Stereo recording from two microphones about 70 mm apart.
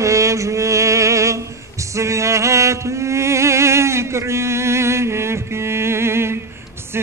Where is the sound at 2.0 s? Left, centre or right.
Right.